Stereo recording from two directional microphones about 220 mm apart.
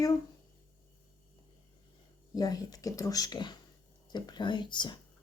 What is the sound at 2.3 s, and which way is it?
Speech, 20° left (ahead or behind).